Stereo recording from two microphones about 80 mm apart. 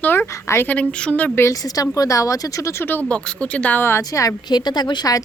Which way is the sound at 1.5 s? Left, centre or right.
Left.